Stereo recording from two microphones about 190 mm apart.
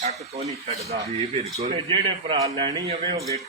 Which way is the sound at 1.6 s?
30° right (ahead or behind).